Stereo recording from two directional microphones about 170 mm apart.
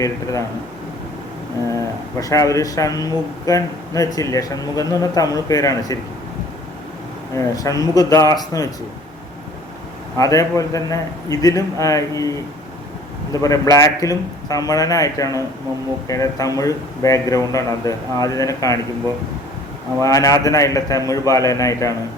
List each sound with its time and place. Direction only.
0.0 s a man's voice: 20° left (ahead or behind)
2.2 s a man's voice: 20° left (ahead or behind)
7.3 s a man's voice: 20° left (ahead or behind)
10.2 s a man's voice: 20° left (ahead or behind)
13.3 s a man's voice: 20° left (ahead or behind)
20.0 s a man's voice: 20° left (ahead or behind)